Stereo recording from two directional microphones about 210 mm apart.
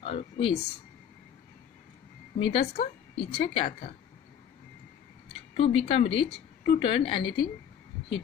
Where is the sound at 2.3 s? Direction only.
25° left (ahead or behind).